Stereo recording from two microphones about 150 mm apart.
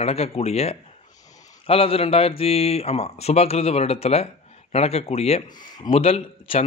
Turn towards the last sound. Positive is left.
turn(degrees=40)  # may be behind; listen again after turning